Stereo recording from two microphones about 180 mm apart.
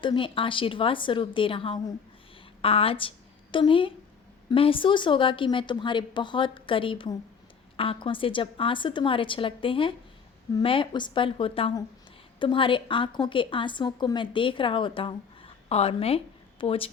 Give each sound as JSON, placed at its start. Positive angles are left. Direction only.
{"t": 0.0, "sound": "a woman's voice", "side_deg": 30}